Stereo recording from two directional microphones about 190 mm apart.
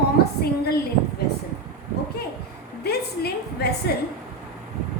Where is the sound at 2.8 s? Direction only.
55° left (ahead or behind).